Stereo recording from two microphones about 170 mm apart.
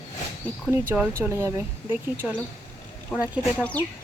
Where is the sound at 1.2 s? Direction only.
15° right (ahead or behind).